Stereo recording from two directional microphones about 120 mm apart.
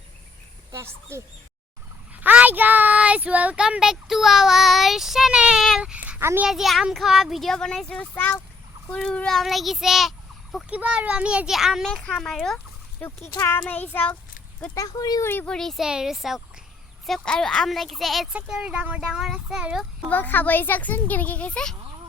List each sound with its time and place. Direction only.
0.7 s speech: 25° right (ahead or behind)
2.2 s speech: 15° right (ahead or behind)
6.4 s a child's voice: centre (ahead or behind); by 14.2 s 15° left (ahead or behind)
14.8 s speech: 35° left (ahead or behind)
15.2 s speech: 20° left (ahead or behind)
15.4 s a child's voice: 5° left (ahead or behind)
20.1 s speech: 15° left (ahead or behind)